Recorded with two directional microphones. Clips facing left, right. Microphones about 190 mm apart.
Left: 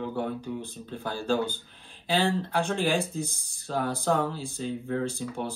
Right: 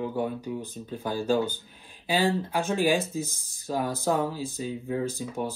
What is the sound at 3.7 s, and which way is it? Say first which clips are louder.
Speech: even; 10° right (ahead or behind).